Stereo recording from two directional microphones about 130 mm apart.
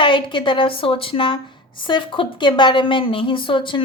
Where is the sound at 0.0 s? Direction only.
40° left (ahead or behind).